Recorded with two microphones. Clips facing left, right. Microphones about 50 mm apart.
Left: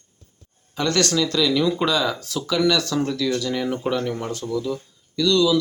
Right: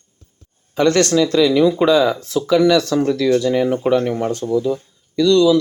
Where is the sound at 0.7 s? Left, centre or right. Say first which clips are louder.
Right 7 dB; right.